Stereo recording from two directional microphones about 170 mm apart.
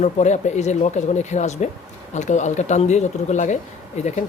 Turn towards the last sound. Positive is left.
turn(degrees=45)  # may be behind; listen again after turning